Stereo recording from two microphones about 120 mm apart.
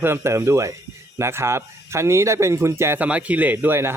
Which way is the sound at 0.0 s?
20° right (ahead or behind).